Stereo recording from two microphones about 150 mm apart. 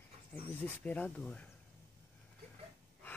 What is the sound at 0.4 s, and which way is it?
Speech, 40° right (ahead or behind).